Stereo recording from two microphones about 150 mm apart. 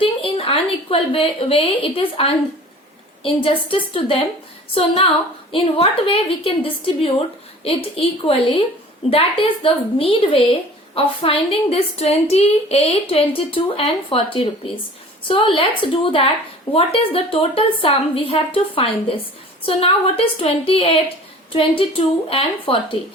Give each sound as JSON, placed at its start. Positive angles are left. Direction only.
{"t": 0.0, "sound": "a woman's voice", "side_deg": 40}
{"t": 5.5, "sound": "a woman's voice", "side_deg": 35}